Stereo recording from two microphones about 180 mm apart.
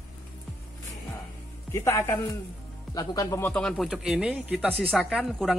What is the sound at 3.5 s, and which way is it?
Speech, 5° left (ahead or behind).